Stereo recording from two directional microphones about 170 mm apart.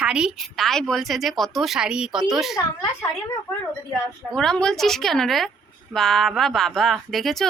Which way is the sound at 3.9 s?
5° left (ahead or behind).